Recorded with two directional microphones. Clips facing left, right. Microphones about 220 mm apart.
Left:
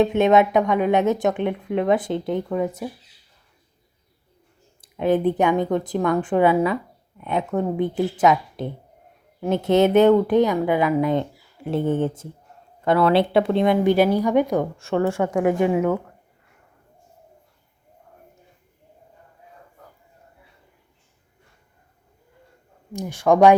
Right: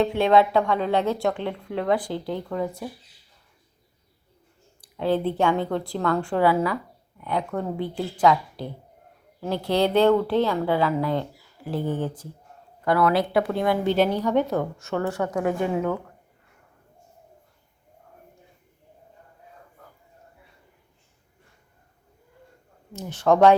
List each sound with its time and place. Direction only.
0.0 s a woman's voice: 20° left (ahead or behind)
4.8 s a woman's voice: 20° left (ahead or behind)
14.8 s a woman's voice: 25° left (ahead or behind)
22.9 s speech: 15° left (ahead or behind)